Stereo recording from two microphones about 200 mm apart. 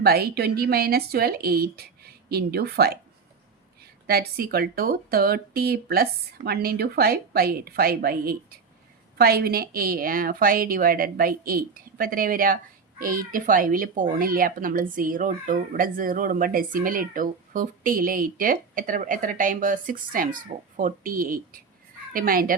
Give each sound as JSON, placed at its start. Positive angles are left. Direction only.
{"t": 0.0, "sound": "speech", "side_deg": -50}
{"t": 4.0, "sound": "speech", "side_deg": -50}